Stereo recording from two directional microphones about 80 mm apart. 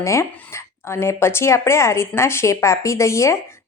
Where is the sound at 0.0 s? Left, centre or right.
Left.